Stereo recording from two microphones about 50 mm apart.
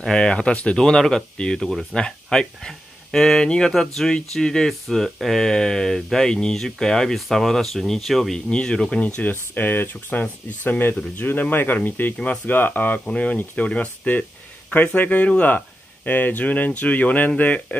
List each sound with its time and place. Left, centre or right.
0.1 s speech: centre
1.7 s speech: centre
2.2 s speech: centre
8.5 s speech: centre
9.0 s speech: left
9.3 s speech: left
13.0 s speech: left